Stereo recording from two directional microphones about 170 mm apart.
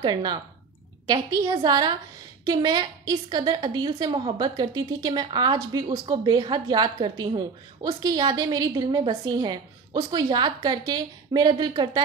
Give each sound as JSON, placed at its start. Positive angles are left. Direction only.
{"t": 0.0, "sound": "a woman's voice", "side_deg": -25}